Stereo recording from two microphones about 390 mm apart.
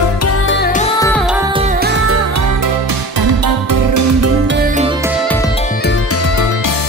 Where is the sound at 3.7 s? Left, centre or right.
Right.